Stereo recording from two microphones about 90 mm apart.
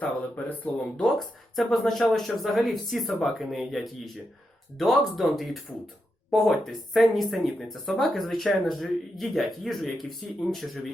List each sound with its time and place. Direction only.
0.0 s speech: 20° left (ahead or behind)
1.0 s speech: 5° left (ahead or behind)